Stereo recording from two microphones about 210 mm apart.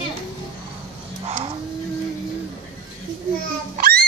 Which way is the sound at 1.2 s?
30° right (ahead or behind).